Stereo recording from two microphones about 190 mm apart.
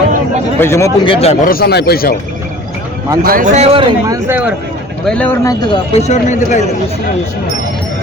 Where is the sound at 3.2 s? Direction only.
50° right (ahead or behind).